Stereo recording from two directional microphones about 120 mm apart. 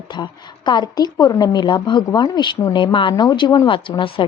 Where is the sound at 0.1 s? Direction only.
40° left (ahead or behind).